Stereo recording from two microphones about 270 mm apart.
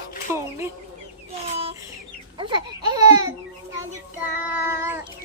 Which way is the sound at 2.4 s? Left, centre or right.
Centre.